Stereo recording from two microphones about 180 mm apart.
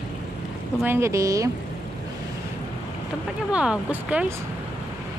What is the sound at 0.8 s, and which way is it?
Speech, 15° right (ahead or behind).